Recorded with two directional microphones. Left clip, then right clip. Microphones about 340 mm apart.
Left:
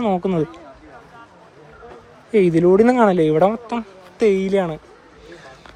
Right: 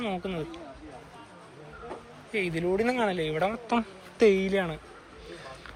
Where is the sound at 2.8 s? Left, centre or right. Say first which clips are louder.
Left 13 dB; left.